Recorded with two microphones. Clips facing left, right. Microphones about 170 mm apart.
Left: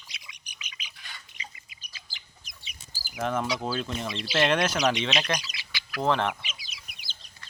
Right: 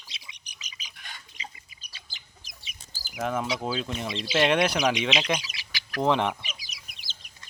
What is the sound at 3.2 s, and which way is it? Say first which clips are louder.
Speech: even; 5° right (ahead or behind).